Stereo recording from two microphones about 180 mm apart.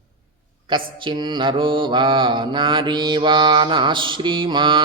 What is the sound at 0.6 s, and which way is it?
Mantra, 25° right (ahead or behind).